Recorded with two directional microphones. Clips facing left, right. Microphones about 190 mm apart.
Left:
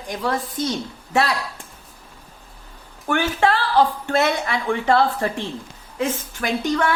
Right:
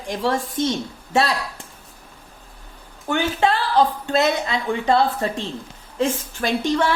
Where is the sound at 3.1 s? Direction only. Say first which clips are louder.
Even; 20° right (ahead or behind).